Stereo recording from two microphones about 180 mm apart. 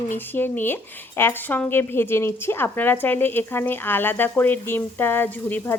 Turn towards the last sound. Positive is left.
turn(degrees=10)  # may be behind; listen again after turning